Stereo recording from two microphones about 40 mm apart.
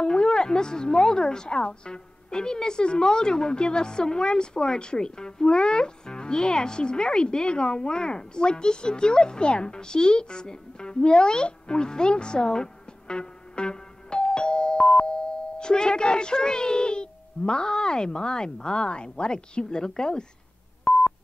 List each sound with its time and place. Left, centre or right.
0.0 s a woman's voice: left
13.1 s music: left
15.6 s a woman's voice: centre
20.8 s telephone dialing: left